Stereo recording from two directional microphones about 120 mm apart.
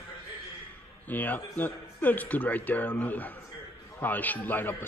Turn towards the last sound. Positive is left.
turn(degrees=15)  # may be behind; listen again after turning